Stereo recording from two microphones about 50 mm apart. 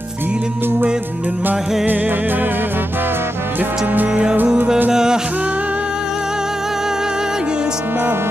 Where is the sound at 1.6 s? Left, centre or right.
Centre.